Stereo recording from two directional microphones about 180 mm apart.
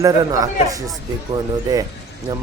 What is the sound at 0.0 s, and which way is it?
Speech, 20° right (ahead or behind).